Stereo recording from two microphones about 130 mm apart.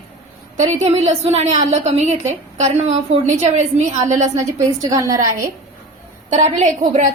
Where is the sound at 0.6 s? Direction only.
60° right (ahead or behind).